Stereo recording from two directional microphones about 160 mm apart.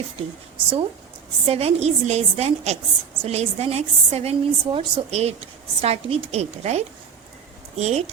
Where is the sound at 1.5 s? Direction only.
40° right (ahead or behind).